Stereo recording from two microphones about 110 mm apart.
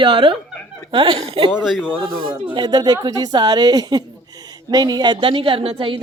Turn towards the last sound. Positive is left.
turn(degrees=-55)  # may be behind; listen again after turning